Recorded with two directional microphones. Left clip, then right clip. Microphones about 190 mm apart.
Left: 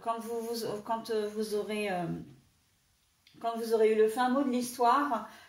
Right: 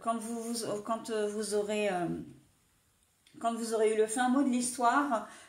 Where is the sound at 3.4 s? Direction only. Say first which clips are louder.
Left 2 dB; 50° right (ahead or behind).